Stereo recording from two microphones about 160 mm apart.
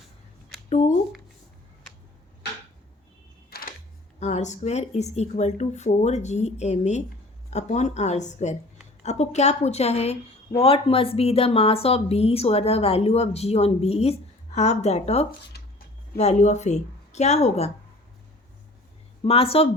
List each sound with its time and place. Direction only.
0.7 s a sound: 50° left (ahead or behind)
3.5 s camera: 65° left (ahead or behind)
4.2 s a woman's voice: 45° left (ahead or behind)
15.5 s a sound: 90° left
16.1 s speech: 45° left (ahead or behind)
19.2 s a woman's voice: 35° left (ahead or behind)